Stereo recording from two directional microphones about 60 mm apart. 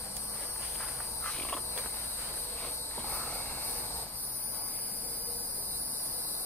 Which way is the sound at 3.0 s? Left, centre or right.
Left.